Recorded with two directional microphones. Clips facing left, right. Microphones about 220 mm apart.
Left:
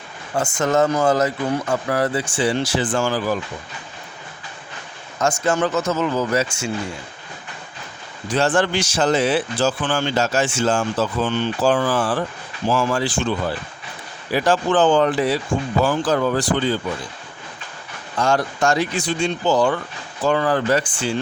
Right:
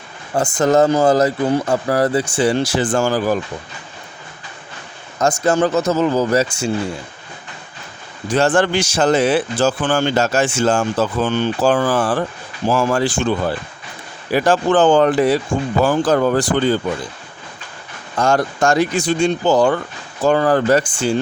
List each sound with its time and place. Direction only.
0.3 s a man's voice: 35° right (ahead or behind)
5.2 s a man's voice: 35° right (ahead or behind)
8.3 s a man's voice: 50° right (ahead or behind)
14.3 s a man's voice: 45° right (ahead or behind)
18.2 s a man's voice: 45° right (ahead or behind)